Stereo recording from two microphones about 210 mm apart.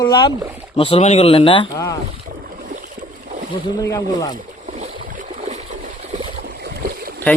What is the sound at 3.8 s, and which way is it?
Speech, 15° left (ahead or behind).